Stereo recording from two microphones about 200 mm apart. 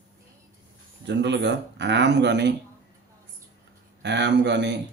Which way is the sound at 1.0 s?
60° right (ahead or behind).